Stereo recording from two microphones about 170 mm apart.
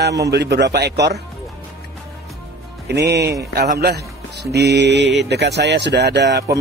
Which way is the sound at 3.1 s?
80° right.